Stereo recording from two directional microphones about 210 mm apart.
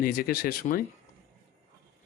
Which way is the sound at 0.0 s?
45° left (ahead or behind).